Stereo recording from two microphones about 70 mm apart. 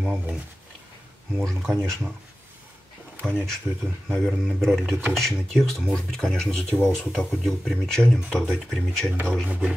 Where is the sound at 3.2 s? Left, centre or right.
Centre.